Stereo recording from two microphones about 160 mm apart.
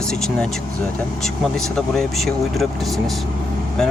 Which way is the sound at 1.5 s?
5° left (ahead or behind).